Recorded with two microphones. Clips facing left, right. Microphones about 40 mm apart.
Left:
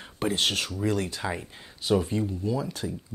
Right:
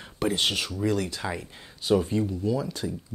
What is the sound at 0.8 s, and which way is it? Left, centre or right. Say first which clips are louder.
Speech: right 1 dB; left.